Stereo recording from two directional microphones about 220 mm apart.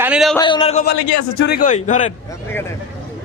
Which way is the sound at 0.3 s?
20° left (ahead or behind).